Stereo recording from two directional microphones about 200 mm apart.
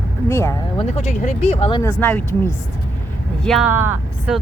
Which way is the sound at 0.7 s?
35° left (ahead or behind).